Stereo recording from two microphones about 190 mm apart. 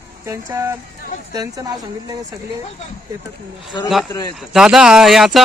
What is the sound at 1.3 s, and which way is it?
Speech, 20° right (ahead or behind).